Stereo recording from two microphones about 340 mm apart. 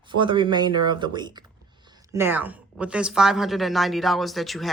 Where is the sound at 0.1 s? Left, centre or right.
Centre.